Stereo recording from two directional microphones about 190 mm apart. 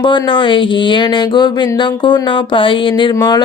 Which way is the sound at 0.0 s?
25° left (ahead or behind).